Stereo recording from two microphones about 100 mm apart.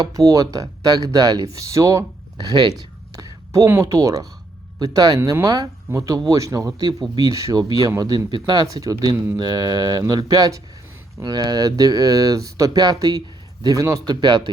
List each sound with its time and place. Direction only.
0.0 s speech: 35° right (ahead or behind)
1.5 s a sound: 35° right (ahead or behind)
3.7 s speech: 30° right (ahead or behind); by 14.5 s 45° right (ahead or behind)